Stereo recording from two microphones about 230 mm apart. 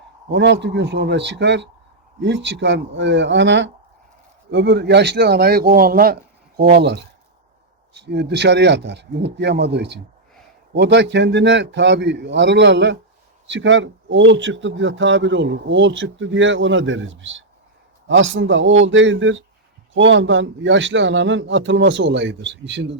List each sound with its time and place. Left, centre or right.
0.3 s a man's voice: right